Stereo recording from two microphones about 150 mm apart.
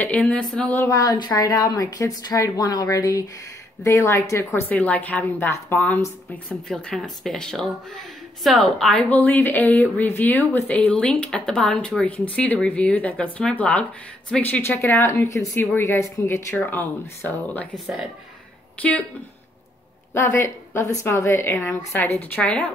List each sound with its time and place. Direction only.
0.0 s a woman's voice: 10° left (ahead or behind)
0.8 s a woman's voice: 25° left (ahead or behind)
6.7 s a woman's voice: centre (ahead or behind)
18.8 s a woman's voice: 10° left (ahead or behind)
20.2 s a woman's voice: 20° left (ahead or behind)